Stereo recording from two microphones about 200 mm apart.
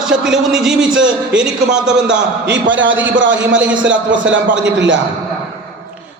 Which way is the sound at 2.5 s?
70° right (ahead or behind).